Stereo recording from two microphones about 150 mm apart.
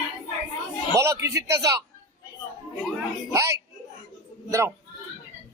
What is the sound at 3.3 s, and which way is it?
Speech, 20° right (ahead or behind).